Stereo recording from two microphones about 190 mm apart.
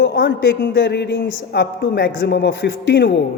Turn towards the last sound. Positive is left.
turn(degrees=75)  # may be behind; listen again after turning